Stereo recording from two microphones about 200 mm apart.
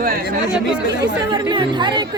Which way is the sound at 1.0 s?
20° right (ahead or behind).